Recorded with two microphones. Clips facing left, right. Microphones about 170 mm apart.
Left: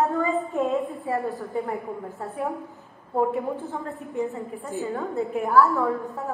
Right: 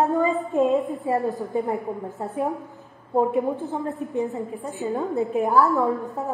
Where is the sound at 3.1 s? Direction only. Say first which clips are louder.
Right 3 dB; 15° right (ahead or behind).